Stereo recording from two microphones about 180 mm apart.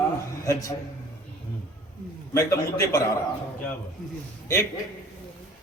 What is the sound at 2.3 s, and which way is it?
Speech, 15° left (ahead or behind).